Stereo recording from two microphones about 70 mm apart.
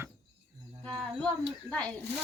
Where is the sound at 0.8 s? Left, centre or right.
Centre.